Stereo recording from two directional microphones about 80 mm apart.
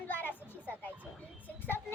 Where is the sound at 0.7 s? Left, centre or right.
Left.